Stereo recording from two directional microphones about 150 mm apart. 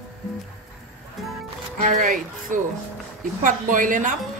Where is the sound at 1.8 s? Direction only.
60° right (ahead or behind).